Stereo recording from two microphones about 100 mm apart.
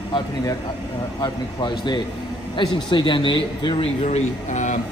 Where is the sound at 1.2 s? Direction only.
50° left (ahead or behind); by 4.3 s 80° left.